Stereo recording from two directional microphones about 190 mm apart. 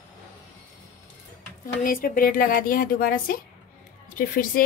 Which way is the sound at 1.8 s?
45° left (ahead or behind).